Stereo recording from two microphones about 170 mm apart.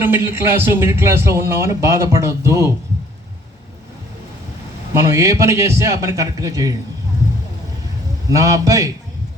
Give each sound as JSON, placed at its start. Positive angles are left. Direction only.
{"t": 0.0, "sound": "a man's voice", "side_deg": -15}
{"t": 5.1, "sound": "a man's voice", "side_deg": -15}
{"t": 8.3, "sound": "a man's voice", "side_deg": -20}